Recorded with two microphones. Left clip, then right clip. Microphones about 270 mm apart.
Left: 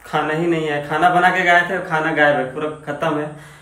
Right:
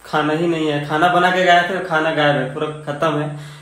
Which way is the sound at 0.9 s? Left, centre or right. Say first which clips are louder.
Left 1 dB; centre.